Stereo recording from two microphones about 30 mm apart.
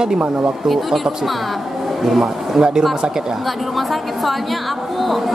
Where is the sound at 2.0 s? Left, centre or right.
Centre.